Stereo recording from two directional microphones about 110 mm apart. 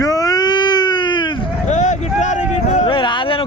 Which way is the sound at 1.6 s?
90° left.